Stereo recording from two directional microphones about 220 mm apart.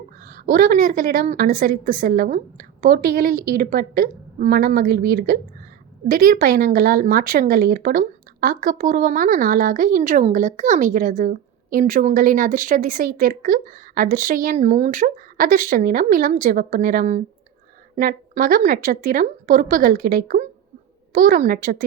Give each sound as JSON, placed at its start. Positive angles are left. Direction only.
{"t": 0.3, "sound": "a woman's voice", "side_deg": -40}